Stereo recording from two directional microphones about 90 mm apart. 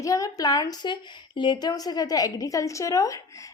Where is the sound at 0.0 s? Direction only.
40° left (ahead or behind).